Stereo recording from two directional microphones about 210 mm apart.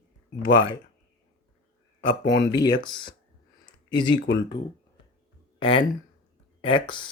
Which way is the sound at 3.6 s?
20° left (ahead or behind).